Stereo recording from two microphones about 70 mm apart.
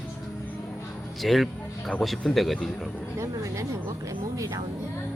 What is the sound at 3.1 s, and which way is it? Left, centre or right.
Speech, right.